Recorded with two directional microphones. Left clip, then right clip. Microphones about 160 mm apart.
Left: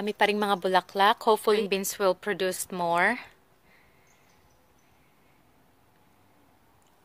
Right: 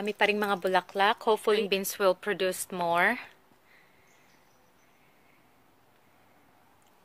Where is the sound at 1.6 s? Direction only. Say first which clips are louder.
Left 1 dB; 20° left (ahead or behind).